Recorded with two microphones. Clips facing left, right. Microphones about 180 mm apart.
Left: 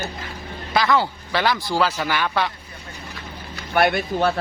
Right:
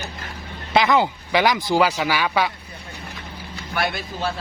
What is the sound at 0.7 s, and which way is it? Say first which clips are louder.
Speech: right 2 dB; 20° right (ahead or behind).